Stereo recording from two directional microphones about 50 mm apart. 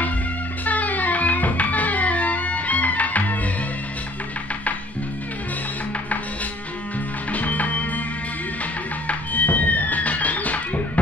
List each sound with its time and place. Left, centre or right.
0.7 s music: left
7.3 s music: left
9.0 s music: left